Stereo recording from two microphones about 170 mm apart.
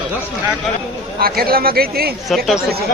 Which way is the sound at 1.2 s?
60° right (ahead or behind).